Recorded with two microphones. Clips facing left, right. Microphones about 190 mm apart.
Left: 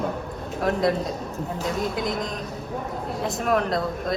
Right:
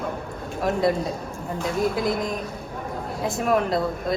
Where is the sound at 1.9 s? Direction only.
5° right (ahead or behind).